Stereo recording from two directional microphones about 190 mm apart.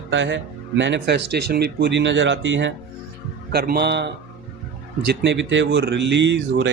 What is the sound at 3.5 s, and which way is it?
A man's voice, 55° right (ahead or behind).